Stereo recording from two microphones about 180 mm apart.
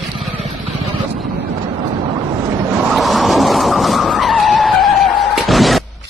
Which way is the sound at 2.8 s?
Centre (ahead or behind).